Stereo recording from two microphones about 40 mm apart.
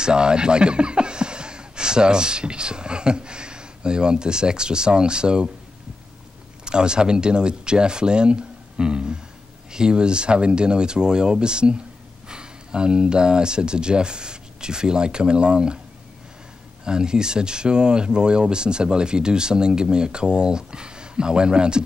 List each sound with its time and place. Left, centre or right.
0.0 s speech: right
6.6 s speech: right
16.8 s speech: centre